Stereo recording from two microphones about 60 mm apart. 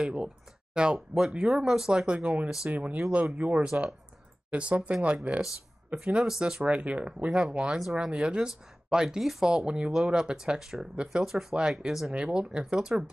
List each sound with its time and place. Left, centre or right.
0.7 s speech: centre
12.1 s speech: centre